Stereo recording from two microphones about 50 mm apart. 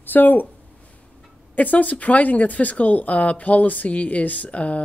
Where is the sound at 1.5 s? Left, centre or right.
Left.